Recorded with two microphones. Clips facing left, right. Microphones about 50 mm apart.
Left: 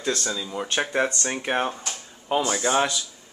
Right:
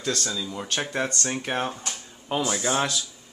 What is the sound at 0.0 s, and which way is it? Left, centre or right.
Speech, centre.